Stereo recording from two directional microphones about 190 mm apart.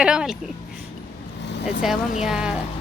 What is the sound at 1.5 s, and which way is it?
Vehicle, 60° left (ahead or behind).